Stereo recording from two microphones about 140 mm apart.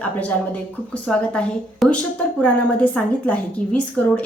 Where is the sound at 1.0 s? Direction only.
5° left (ahead or behind).